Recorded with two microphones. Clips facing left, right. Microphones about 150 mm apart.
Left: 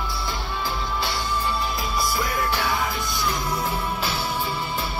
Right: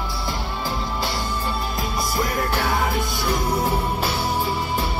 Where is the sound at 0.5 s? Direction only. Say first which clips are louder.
Left 1 dB; 40° right (ahead or behind).